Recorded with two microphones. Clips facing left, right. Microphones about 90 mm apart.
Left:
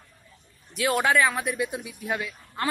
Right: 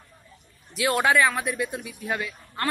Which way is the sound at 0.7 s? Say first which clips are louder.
Right 1 dB; centre (ahead or behind).